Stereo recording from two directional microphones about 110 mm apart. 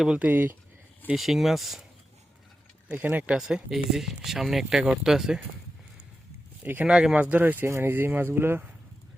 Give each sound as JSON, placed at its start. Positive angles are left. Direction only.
{"t": 0.0, "sound": "speech", "side_deg": -10}
{"t": 1.1, "sound": "speech", "side_deg": 0}
{"t": 2.9, "sound": "speech", "side_deg": -15}
{"t": 6.6, "sound": "speech", "side_deg": -15}